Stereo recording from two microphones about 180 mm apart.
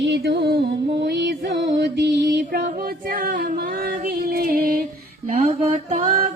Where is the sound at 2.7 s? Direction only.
50° right (ahead or behind).